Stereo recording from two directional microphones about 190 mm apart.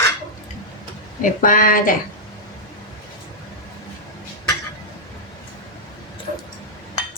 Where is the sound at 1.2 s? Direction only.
45° left (ahead or behind).